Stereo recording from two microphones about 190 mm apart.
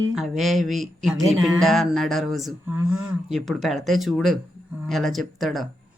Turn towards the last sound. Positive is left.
turn(degrees=0)  # may be behind; listen again after turning